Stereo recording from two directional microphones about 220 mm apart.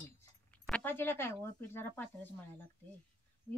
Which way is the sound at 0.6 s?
5° left (ahead or behind).